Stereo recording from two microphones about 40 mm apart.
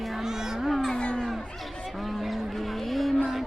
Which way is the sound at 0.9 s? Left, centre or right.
Left.